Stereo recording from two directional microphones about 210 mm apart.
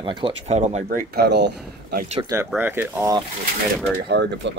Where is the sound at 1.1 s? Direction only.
55° right (ahead or behind).